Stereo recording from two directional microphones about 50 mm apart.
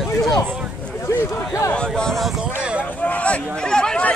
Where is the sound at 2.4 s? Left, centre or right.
Centre.